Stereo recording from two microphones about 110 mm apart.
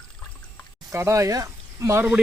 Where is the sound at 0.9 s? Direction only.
30° right (ahead or behind).